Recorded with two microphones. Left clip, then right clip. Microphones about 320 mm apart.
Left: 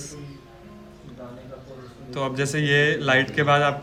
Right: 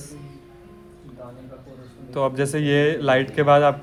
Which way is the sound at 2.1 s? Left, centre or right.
Centre.